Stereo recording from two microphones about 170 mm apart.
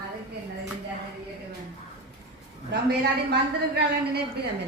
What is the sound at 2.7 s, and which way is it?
Speech, 70° right (ahead or behind).